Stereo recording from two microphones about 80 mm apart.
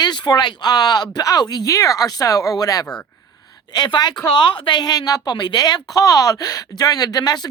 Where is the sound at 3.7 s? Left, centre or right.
Left.